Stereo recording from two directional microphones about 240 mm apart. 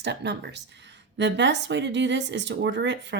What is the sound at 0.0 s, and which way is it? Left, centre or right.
Speech, right.